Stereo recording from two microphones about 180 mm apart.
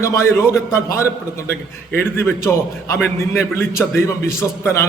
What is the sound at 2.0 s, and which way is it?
A man's voice, 15° left (ahead or behind).